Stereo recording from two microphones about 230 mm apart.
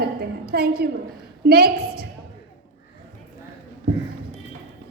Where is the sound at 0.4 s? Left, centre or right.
Right.